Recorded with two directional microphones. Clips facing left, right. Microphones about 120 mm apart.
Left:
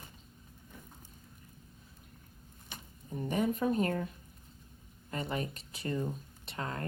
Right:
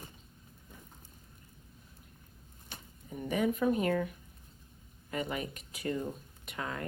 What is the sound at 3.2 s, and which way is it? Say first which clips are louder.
Speech: right 1 dB; 40° left (ahead or behind).